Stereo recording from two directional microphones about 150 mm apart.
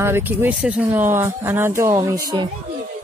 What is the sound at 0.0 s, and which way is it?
Speech, 15° right (ahead or behind).